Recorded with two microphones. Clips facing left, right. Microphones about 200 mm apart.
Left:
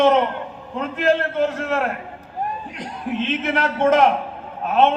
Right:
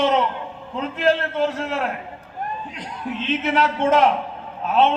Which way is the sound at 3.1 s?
50° left (ahead or behind).